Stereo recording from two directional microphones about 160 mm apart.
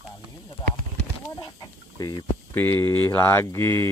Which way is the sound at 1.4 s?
25° left (ahead or behind).